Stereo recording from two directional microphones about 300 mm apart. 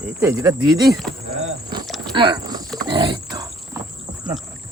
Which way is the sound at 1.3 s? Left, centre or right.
Right.